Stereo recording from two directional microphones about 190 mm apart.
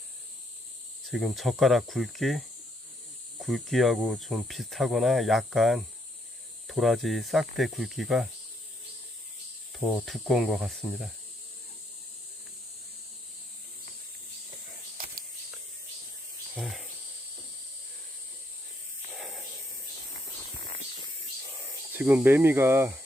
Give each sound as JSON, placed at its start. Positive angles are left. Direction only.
{"t": 1.1, "sound": "speech", "side_deg": 0}
{"t": 3.4, "sound": "speech", "side_deg": 0}
{"t": 9.7, "sound": "speech", "side_deg": 0}
{"t": 14.9, "sound": "a sound", "side_deg": -50}
{"t": 16.6, "sound": "speech", "side_deg": 0}
{"t": 19.1, "sound": "a sound", "side_deg": 0}
{"t": 21.9, "sound": "speech", "side_deg": -10}